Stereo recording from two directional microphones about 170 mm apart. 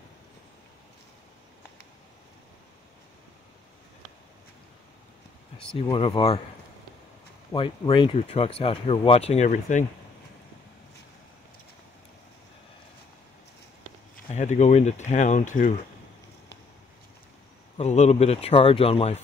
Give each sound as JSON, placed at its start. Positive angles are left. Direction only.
{"t": 5.8, "sound": "speech", "side_deg": 30}
{"t": 7.5, "sound": "speech", "side_deg": 30}
{"t": 14.3, "sound": "speech", "side_deg": 45}
{"t": 17.7, "sound": "speech", "side_deg": 40}